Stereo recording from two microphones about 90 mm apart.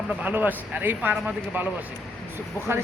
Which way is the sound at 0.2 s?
20° right (ahead or behind).